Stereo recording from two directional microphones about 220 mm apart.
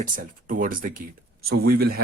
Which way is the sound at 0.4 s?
40° right (ahead or behind).